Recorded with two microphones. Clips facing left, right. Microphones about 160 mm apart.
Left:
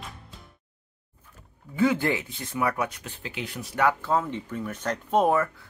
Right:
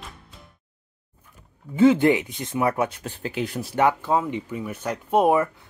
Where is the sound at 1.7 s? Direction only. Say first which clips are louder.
Right 7 dB; 25° right (ahead or behind).